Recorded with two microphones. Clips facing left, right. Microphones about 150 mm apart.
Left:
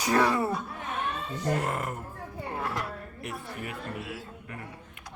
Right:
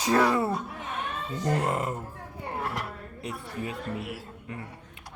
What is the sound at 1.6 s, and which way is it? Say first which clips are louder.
Speech: right 3 dB; 20° right (ahead or behind).